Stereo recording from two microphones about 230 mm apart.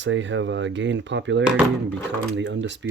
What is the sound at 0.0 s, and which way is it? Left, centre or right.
Speech, right.